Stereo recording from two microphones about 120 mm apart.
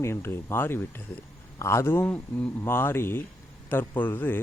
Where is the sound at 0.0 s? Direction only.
20° left (ahead or behind).